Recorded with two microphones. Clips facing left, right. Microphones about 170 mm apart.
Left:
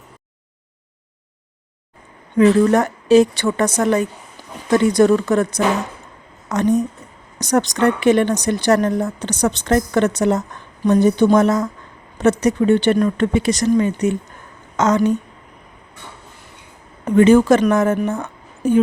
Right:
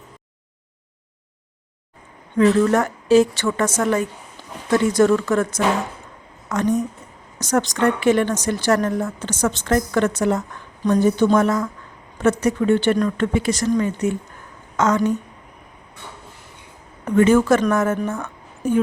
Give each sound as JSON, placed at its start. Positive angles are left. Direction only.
{"t": 2.7, "sound": "speech", "side_deg": 20}
{"t": 4.7, "sound": "speech", "side_deg": 15}
{"t": 17.1, "sound": "a woman's voice", "side_deg": 20}